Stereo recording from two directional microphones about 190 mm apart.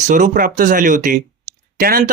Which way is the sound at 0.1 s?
45° right (ahead or behind).